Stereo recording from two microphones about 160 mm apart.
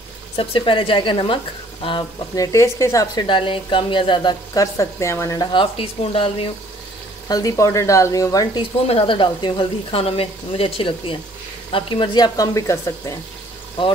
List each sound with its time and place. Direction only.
0.4 s speech: 35° left (ahead or behind)
7.2 s speech: 20° left (ahead or behind)
8.8 s speech: 35° left (ahead or behind); by 13.1 s 20° left (ahead or behind)